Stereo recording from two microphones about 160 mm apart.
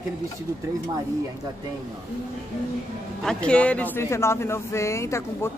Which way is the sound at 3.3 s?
5° left (ahead or behind).